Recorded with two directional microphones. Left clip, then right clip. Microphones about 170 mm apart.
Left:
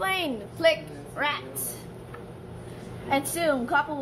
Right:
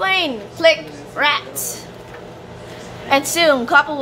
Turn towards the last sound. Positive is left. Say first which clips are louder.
# right 11 dB
turn(degrees=-15)  # may be behind; listen again after turning